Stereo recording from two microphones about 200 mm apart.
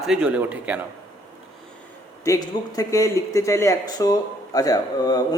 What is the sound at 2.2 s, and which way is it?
Speech, 15° left (ahead or behind).